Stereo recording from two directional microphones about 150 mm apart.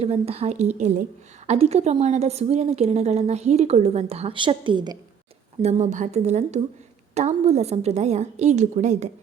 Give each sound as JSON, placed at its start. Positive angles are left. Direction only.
{"t": 0.0, "sound": "a woman's voice", "side_deg": -45}
{"t": 5.6, "sound": "a woman's voice", "side_deg": -50}